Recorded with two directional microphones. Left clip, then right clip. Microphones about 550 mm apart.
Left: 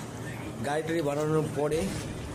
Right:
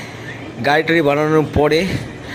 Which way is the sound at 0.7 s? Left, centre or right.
Left.